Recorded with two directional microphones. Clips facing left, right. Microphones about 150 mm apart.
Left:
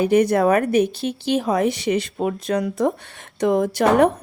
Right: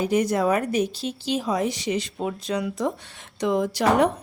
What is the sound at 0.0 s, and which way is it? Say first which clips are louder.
Speech: left 5 dB; 60° left (ahead or behind).